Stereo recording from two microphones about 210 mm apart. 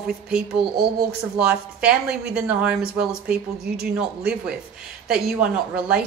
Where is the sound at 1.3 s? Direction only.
5° right (ahead or behind).